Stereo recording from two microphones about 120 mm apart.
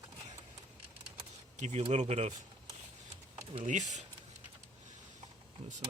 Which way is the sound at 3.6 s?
85° right.